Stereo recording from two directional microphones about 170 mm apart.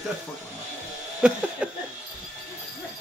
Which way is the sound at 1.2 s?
5° right (ahead or behind).